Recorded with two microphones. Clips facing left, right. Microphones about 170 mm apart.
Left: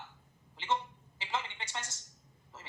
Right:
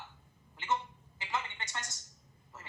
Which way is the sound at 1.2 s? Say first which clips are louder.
Even; 30° left (ahead or behind).